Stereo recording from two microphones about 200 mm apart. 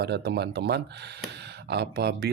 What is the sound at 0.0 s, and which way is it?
Speech, 55° right (ahead or behind).